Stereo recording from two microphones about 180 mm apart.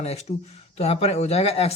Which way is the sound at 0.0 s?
35° left (ahead or behind).